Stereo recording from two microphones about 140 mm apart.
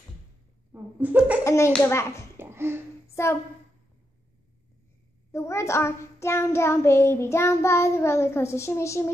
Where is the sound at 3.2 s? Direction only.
20° left (ahead or behind).